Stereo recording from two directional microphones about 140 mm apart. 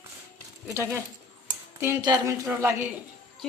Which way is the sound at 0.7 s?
20° right (ahead or behind).